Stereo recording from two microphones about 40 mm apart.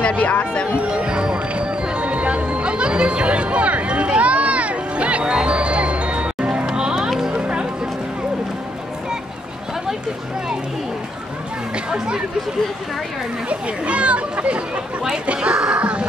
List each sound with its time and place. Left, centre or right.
0.1 s speech: left
0.8 s music: right
7.0 s music: centre
7.3 s music: right
11.7 s speech: right
13.5 s a child's voice: right
15.3 s speech: centre
15.8 s music: right